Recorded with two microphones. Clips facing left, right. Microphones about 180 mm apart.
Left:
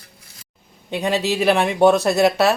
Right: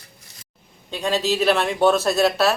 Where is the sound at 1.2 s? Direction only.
15° left (ahead or behind).